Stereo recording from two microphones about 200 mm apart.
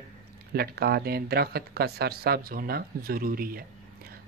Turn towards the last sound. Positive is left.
turn(degrees=-45)  # may be behind; listen again after turning